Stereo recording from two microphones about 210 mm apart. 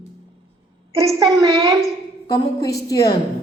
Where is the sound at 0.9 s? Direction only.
15° right (ahead or behind).